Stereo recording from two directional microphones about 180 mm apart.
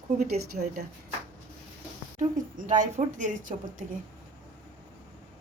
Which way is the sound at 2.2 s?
45° right (ahead or behind).